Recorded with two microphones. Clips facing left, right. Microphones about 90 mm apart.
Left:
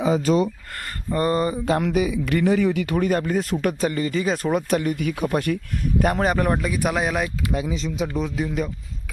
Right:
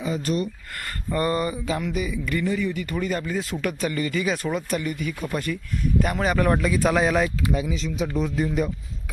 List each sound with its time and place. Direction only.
0.0 s speech: 90° left
1.1 s a sound: 30° left (ahead or behind)
1.8 s speech: 70° left (ahead or behind); by 3.4 s 55° left (ahead or behind)
3.5 s speech: 40° left (ahead or behind)
4.5 s speech: 55° left (ahead or behind)
6.0 s a man's voice: 45° left (ahead or behind)
6.2 s a sound: 25° left (ahead or behind)
6.5 s speech: 15° left (ahead or behind)
7.5 s a sound: 20° left (ahead or behind)
7.9 s speech: 10° left (ahead or behind)